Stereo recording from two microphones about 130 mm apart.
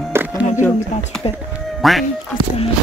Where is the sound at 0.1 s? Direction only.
20° right (ahead or behind).